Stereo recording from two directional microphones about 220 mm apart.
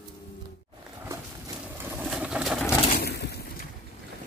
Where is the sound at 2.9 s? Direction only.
45° left (ahead or behind).